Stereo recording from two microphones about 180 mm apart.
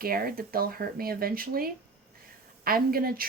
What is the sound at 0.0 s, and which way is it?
Speech, 55° right (ahead or behind).